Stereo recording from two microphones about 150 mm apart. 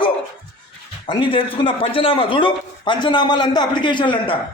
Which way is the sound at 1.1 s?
35° left (ahead or behind).